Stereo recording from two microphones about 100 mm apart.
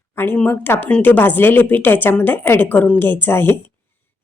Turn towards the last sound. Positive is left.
turn(degrees=20)  # may be behind; listen again after turning